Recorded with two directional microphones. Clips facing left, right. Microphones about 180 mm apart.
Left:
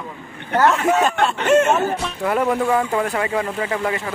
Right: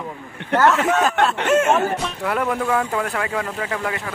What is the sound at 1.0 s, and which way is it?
Speech, centre (ahead or behind).